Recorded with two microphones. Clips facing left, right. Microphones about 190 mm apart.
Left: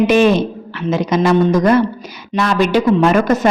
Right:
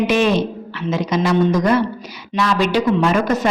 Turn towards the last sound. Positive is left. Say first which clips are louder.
# left 4 dB
turn(degrees=50)  # may be behind; listen again after turning